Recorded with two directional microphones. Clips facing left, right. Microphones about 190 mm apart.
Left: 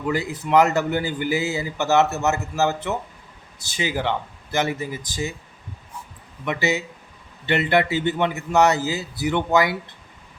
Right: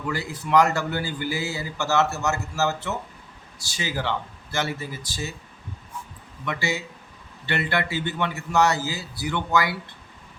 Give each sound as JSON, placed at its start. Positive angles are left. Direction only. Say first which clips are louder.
{"t": 0.1, "sound": "speech", "louder": "left 3 dB", "side_deg": 20}
{"t": 6.4, "sound": "speech", "louder": "left 5 dB", "side_deg": 20}